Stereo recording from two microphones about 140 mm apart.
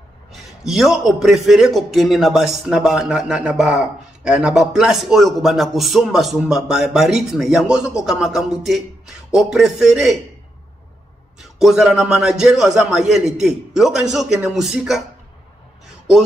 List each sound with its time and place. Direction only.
0.3 s a man's voice: centre (ahead or behind)
11.5 s a man's voice: centre (ahead or behind)